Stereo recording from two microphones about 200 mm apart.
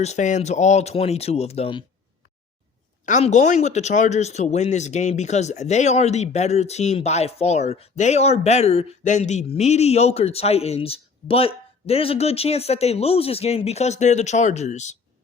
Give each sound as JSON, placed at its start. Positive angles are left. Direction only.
{"t": 0.0, "sound": "speech", "side_deg": 35}
{"t": 3.1, "sound": "speech", "side_deg": 35}